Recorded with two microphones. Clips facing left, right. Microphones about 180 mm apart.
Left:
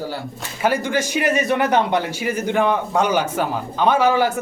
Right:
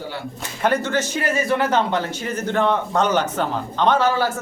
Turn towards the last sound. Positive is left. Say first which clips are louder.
# left 2 dB
turn(degrees=15)  # may be behind; listen again after turning